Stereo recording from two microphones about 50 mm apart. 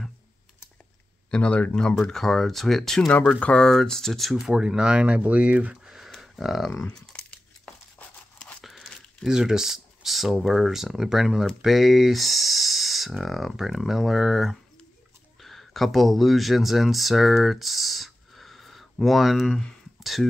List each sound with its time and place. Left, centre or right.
1.3 s speech: left
2.1 s speech: centre
3.3 s speech: left
3.6 s speech: centre
4.5 s speech: centre
5.9 s a sound: centre
6.8 s speech: centre
8.5 s a sound: centre
9.3 s speech: centre